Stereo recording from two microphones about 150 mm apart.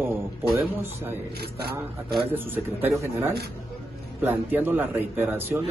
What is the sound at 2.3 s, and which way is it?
A man's voice, 15° right (ahead or behind).